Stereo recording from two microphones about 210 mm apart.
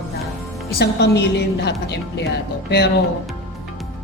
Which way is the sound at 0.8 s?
50° left (ahead or behind).